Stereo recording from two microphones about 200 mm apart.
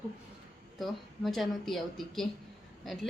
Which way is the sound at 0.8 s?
Centre (ahead or behind).